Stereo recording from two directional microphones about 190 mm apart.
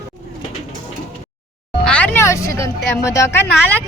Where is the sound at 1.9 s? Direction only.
5° left (ahead or behind).